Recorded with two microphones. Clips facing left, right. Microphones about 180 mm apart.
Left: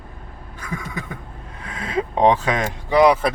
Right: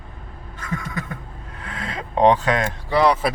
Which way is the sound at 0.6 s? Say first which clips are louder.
Right 1 dB; 10° left (ahead or behind).